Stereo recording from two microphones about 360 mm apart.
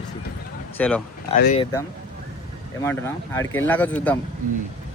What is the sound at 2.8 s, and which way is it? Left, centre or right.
Speech, centre.